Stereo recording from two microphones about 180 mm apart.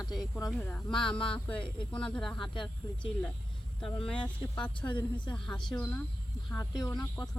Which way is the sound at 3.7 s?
5° left (ahead or behind).